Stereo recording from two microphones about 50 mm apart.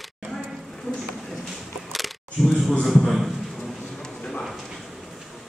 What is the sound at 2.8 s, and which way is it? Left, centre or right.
Speech, centre.